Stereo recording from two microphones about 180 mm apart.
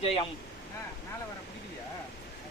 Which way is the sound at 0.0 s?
30° left (ahead or behind).